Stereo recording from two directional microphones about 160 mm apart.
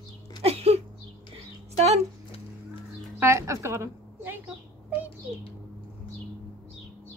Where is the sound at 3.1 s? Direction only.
15° right (ahead or behind).